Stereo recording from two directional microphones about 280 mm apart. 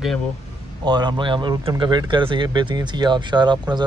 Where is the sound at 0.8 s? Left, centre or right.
Centre.